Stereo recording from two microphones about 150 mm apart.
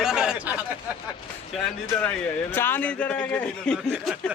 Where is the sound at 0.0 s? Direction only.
5° right (ahead or behind).